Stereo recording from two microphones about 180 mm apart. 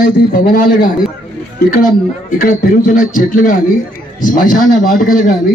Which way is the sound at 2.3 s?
45° left (ahead or behind).